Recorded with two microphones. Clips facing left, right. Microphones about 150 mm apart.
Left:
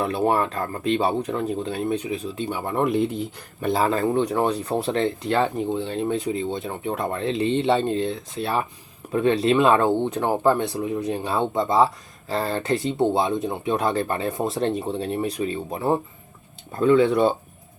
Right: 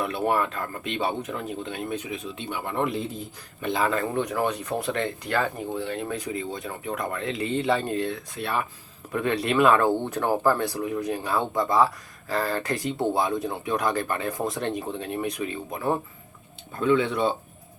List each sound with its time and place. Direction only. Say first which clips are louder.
0.0 s speech: left 3 dB; 30° left (ahead or behind); by 3.2 s 60° left (ahead or behind)
3.6 s speech: left 4 dB; 35° left (ahead or behind)